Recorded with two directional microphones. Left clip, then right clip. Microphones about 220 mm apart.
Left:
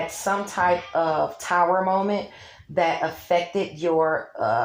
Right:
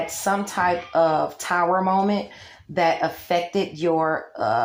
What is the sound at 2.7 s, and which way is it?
Speech, 45° right (ahead or behind).